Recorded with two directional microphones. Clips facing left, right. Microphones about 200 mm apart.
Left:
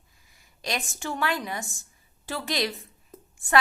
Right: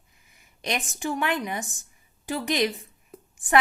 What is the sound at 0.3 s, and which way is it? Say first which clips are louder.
A woman's voice: right 2 dB; 20° right (ahead or behind).